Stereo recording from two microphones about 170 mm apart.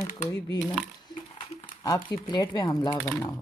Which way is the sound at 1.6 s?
25° left (ahead or behind).